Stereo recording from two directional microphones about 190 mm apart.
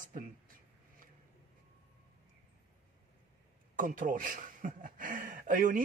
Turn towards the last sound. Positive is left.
turn(degrees=-45)  # may be behind; listen again after turning